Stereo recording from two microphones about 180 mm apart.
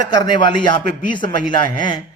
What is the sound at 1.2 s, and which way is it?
Speech, 50° right (ahead or behind).